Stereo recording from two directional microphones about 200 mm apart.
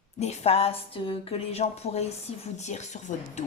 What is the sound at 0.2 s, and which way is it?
A woman's voice, 30° left (ahead or behind).